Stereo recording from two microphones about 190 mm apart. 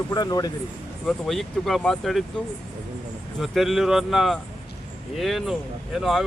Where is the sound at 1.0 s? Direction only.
Centre (ahead or behind).